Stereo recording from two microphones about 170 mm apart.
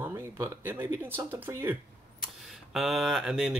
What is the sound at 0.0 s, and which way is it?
Speech, 15° right (ahead or behind).